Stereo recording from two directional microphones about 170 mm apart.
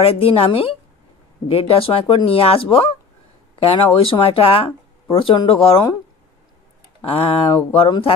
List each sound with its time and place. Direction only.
0.0 s speech: 35° left (ahead or behind)
7.1 s speech: 35° left (ahead or behind)